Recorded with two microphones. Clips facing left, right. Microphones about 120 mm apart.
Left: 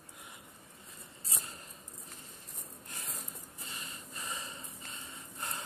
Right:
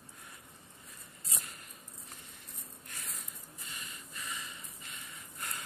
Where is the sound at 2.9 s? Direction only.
30° left (ahead or behind).